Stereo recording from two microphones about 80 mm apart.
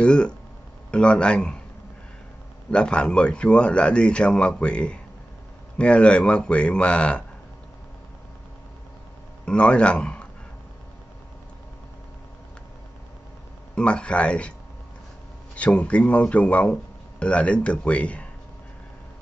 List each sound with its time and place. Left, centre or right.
0.0 s speech: centre
2.7 s speech: centre
9.5 s speech: centre
13.7 s speech: centre
15.5 s speech: centre